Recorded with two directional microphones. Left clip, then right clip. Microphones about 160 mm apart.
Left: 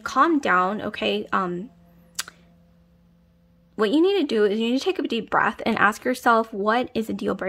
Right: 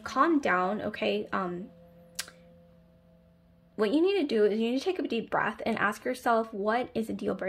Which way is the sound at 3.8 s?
35° left (ahead or behind).